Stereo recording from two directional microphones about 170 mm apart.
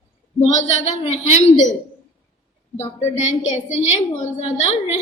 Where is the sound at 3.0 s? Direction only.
40° left (ahead or behind).